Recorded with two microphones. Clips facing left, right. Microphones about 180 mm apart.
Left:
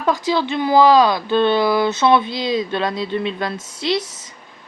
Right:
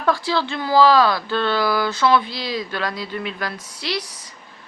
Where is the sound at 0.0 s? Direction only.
20° left (ahead or behind).